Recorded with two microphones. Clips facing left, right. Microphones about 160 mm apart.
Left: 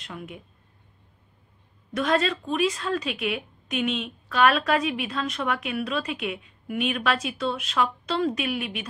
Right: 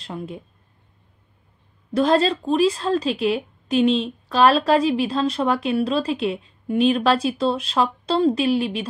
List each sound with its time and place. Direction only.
0.0 s a woman's voice: 30° right (ahead or behind)
2.0 s a woman's voice: 30° right (ahead or behind)